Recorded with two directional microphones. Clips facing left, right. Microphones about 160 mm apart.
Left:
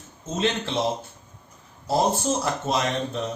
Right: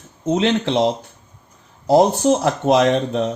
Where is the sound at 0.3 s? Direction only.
70° right (ahead or behind).